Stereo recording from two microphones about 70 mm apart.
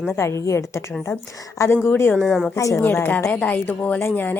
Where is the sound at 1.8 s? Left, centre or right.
Left.